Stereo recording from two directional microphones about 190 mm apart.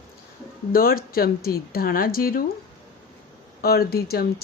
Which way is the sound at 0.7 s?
50° left (ahead or behind).